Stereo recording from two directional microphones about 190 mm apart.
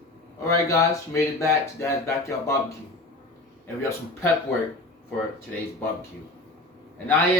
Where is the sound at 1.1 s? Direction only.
15° left (ahead or behind).